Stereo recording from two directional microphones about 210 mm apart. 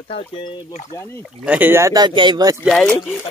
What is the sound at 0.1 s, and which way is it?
Speech, 25° left (ahead or behind).